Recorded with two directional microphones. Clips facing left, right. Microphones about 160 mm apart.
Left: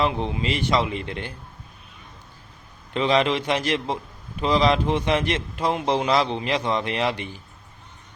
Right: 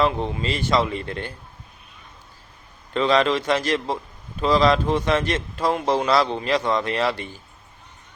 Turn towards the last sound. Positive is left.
turn(degrees=15)  # may be behind; listen again after turning